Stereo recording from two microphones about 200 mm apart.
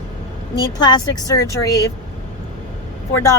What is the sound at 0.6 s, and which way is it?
A woman's voice, 20° left (ahead or behind).